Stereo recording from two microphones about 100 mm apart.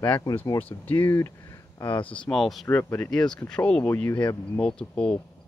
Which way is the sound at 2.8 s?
25° left (ahead or behind).